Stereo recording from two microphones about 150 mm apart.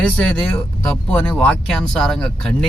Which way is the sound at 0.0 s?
10° left (ahead or behind).